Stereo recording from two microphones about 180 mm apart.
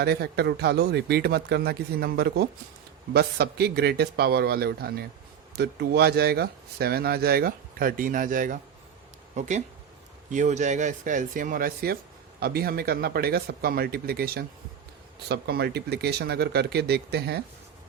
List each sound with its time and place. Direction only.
0.0 s speech: 65° right (ahead or behind)